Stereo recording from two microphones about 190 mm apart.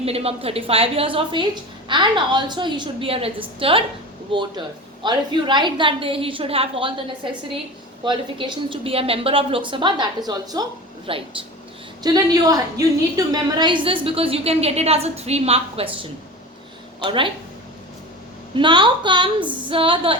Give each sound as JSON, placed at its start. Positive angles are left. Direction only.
{"t": 0.0, "sound": "a woman's voice", "side_deg": -30}
{"t": 8.0, "sound": "a woman's voice", "side_deg": -25}
{"t": 17.0, "sound": "a woman's voice", "side_deg": -25}
{"t": 18.5, "sound": "a woman's voice", "side_deg": -25}